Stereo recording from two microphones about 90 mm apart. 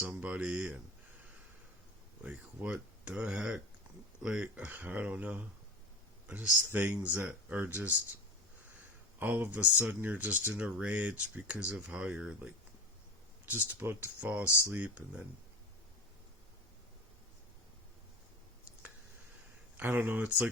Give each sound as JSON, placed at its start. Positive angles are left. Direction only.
{"t": 0.0, "sound": "speech", "side_deg": -15}
{"t": 2.2, "sound": "speech", "side_deg": -15}
{"t": 3.9, "sound": "a sound", "side_deg": -15}
{"t": 4.2, "sound": "speech", "side_deg": -10}
{"t": 9.1, "sound": "speech", "side_deg": -20}
{"t": 19.7, "sound": "speech", "side_deg": -20}